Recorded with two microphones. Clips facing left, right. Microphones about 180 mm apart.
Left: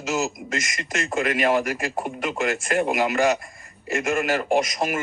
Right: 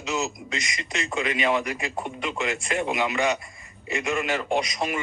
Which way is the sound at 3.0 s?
45° left (ahead or behind).